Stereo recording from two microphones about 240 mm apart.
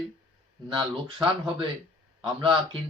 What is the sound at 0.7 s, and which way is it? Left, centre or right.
Speech, centre.